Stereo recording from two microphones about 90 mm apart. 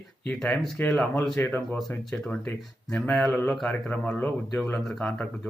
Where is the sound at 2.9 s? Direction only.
10° left (ahead or behind).